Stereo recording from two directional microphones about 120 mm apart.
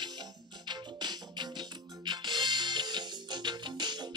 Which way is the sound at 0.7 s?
35° right (ahead or behind).